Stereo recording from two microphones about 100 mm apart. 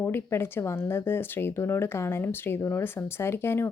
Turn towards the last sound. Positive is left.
turn(degrees=25)  # may be behind; listen again after turning